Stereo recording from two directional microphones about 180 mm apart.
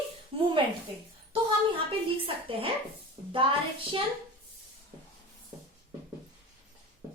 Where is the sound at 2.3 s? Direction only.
30° right (ahead or behind).